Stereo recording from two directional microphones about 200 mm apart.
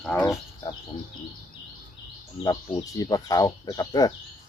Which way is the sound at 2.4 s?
20° left (ahead or behind).